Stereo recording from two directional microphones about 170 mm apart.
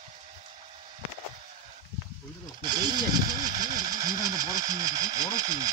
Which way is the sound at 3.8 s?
20° right (ahead or behind).